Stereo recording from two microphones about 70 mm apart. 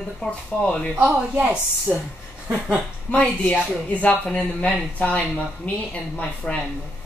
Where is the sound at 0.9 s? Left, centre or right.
Right.